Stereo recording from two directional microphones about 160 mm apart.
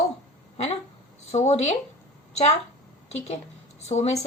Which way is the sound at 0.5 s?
45° left (ahead or behind).